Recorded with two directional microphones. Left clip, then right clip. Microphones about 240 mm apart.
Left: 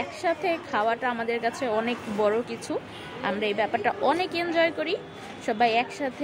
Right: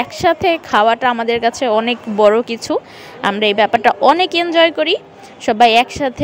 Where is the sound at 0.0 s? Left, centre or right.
Right.